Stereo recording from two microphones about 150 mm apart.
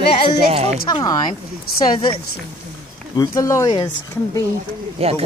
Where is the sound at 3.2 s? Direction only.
20° left (ahead or behind).